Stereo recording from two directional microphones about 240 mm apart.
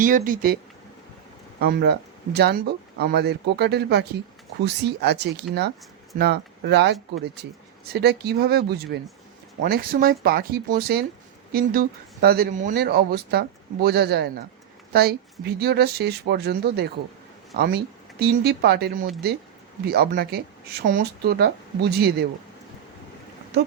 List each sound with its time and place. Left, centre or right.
0.0 s speech: right
1.6 s speech: right
7.9 s speech: right